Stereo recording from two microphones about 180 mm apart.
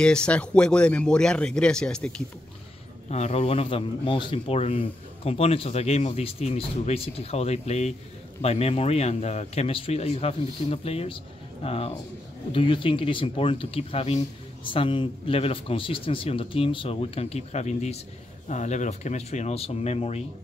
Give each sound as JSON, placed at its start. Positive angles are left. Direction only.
{"t": 0.0, "sound": "speech", "side_deg": 5}
{"t": 3.1, "sound": "speech", "side_deg": 35}